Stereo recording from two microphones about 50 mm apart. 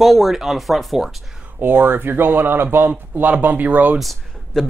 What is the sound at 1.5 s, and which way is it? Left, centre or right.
Speech, right.